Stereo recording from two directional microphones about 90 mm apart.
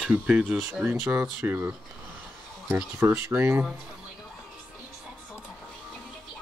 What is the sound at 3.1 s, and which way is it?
Speech, 25° right (ahead or behind).